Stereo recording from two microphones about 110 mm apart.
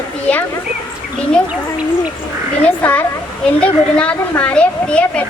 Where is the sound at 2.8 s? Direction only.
15° left (ahead or behind).